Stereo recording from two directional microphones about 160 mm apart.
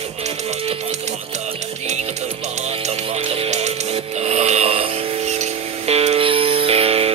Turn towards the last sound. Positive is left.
turn(degrees=-40)  # may be behind; listen again after turning